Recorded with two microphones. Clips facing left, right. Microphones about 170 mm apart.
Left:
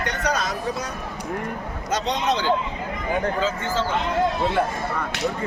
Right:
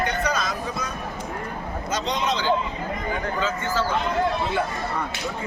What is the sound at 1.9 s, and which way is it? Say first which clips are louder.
Speech: left 2 dB; 65° left (ahead or behind).